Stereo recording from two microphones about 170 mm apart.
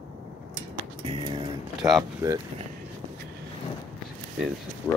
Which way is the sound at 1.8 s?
Centre (ahead or behind).